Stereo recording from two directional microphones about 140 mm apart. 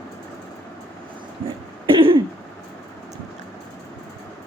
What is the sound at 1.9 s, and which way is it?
Throat clearing, 40° right (ahead or behind).